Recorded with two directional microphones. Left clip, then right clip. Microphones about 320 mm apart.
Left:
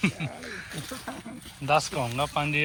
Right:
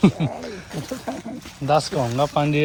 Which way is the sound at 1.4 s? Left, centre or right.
Centre.